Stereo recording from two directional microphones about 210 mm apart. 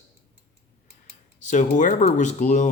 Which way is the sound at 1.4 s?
35° left (ahead or behind).